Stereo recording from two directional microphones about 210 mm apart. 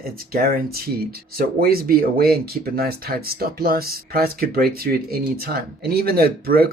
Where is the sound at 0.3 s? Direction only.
45° right (ahead or behind).